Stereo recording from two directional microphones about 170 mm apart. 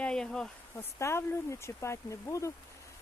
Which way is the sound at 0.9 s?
15° left (ahead or behind).